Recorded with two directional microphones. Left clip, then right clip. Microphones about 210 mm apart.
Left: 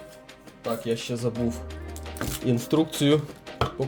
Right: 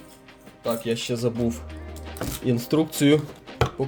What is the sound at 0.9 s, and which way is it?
Speech, 25° right (ahead or behind).